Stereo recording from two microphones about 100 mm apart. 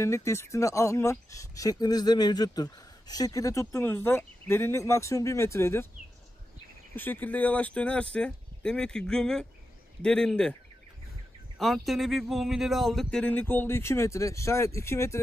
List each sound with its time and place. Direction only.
0.0 s speech: 30° left (ahead or behind)
7.0 s speech: 15° left (ahead or behind)
11.5 s speech: centre (ahead or behind); by 15.1 s 25° left (ahead or behind)